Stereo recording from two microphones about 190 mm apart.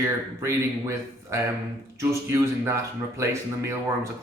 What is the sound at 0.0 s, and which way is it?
Speech, 15° right (ahead or behind).